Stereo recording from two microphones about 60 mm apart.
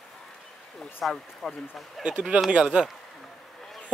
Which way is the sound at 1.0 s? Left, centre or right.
Centre.